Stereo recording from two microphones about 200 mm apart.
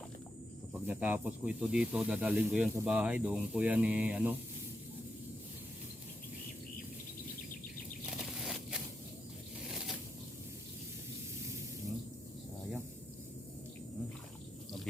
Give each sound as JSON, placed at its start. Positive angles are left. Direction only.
{"t": 0.7, "sound": "speech", "side_deg": -10}
{"t": 8.0, "sound": "a sound", "side_deg": 0}
{"t": 9.6, "sound": "zipper", "side_deg": 0}